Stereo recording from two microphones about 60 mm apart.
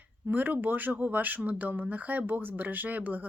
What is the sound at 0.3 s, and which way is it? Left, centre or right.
Speech, right.